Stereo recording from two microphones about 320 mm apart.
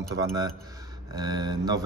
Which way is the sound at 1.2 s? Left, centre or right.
Centre.